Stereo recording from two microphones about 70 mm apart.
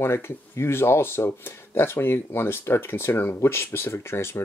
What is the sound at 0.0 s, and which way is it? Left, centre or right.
Speech, left.